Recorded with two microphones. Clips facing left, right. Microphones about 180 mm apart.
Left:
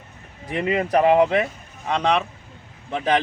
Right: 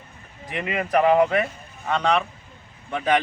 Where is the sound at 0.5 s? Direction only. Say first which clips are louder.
Left 3 dB; 30° left (ahead or behind).